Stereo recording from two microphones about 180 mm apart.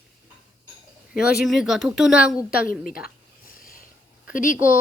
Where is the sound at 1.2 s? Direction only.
Centre (ahead or behind).